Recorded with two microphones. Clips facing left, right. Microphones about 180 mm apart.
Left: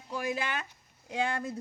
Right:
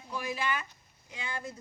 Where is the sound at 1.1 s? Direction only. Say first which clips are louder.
Left 9 dB; 70° left (ahead or behind).